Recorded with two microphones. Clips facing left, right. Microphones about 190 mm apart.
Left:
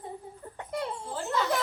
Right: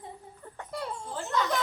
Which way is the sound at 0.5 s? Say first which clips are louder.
Left 3 dB; 20° left (ahead or behind).